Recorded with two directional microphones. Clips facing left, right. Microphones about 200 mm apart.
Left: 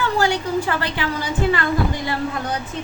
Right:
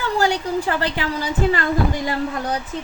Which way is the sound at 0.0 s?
35° right (ahead or behind).